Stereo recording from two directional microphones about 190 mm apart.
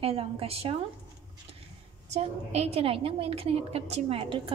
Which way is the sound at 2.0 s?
35° right (ahead or behind).